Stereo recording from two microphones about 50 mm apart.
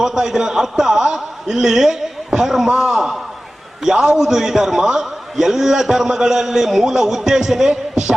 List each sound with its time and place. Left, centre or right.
0.0 s a man's voice: centre